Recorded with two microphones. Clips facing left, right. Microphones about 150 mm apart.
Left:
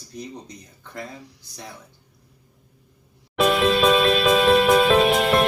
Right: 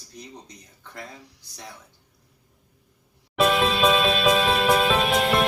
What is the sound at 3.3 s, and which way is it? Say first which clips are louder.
Music: left 2 dB; centre (ahead or behind).